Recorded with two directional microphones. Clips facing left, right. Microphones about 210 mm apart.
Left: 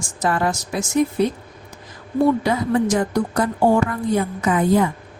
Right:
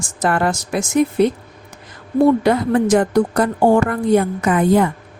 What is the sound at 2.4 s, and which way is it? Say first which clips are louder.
A woman's voice: right 4 dB; 60° right (ahead or behind).